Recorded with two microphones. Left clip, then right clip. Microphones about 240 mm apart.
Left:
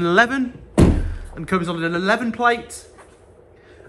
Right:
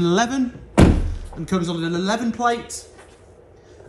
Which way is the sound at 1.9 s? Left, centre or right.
Centre.